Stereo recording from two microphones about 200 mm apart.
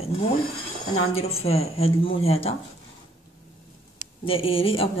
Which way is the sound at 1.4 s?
30° left (ahead or behind).